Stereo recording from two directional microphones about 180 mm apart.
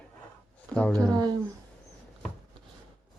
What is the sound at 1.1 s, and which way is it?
Speech, 20° right (ahead or behind).